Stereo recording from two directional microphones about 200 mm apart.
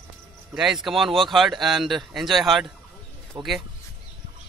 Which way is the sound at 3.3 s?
20° right (ahead or behind).